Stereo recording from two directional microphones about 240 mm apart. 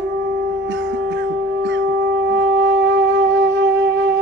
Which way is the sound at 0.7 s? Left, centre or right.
Right.